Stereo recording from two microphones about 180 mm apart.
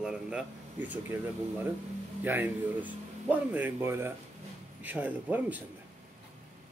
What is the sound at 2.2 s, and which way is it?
Speech, 10° right (ahead or behind).